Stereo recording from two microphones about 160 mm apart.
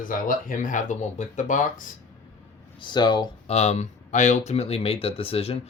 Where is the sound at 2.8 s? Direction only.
30° left (ahead or behind).